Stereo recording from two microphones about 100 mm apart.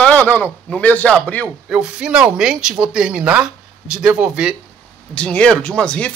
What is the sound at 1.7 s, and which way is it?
Speech, 10° right (ahead or behind).